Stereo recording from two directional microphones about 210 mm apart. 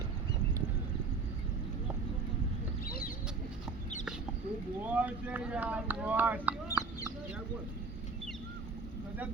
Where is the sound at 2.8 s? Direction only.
45° left (ahead or behind).